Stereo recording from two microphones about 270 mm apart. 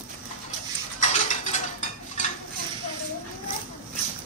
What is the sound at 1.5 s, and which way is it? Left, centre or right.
Dishes, left.